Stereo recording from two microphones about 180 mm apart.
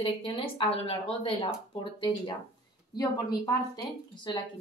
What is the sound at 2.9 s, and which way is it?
Speech, 20° left (ahead or behind).